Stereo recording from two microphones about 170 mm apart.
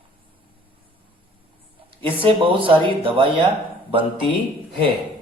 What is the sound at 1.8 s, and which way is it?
A man's voice, 30° right (ahead or behind).